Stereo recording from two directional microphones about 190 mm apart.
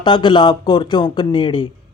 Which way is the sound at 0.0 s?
25° left (ahead or behind).